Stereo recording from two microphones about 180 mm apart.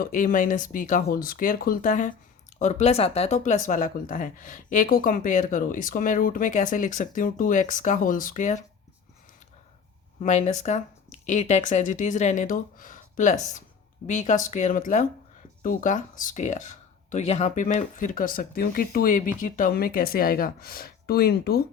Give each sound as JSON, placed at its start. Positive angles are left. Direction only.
{"t": 0.0, "sound": "speech", "side_deg": 50}
{"t": 10.2, "sound": "speech", "side_deg": 40}